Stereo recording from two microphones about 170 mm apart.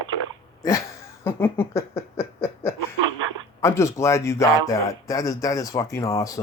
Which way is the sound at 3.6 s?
15° left (ahead or behind).